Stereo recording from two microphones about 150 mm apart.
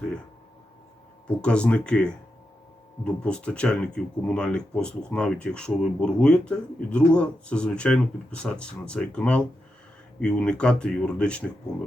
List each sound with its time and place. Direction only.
1.4 s speech: 10° left (ahead or behind)